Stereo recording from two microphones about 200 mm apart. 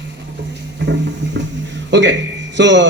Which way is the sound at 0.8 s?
60° right (ahead or behind).